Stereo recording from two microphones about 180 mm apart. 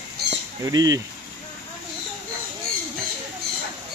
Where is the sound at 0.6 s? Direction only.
20° right (ahead or behind).